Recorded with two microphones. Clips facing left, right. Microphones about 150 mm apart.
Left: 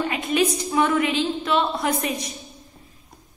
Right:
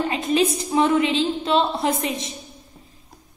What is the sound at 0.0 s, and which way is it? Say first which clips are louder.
A woman's voice: right 2 dB; 25° right (ahead or behind).